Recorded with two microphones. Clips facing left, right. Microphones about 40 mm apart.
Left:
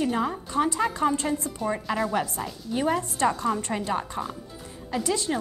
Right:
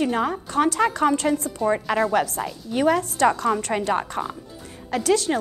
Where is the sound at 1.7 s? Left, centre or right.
Right.